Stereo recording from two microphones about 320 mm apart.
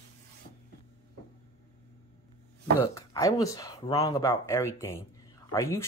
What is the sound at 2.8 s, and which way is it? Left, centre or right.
Speech, centre.